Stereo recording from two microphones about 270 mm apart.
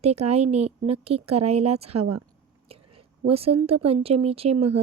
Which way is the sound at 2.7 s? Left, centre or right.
Right.